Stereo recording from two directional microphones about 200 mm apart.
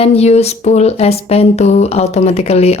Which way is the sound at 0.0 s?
30° left (ahead or behind).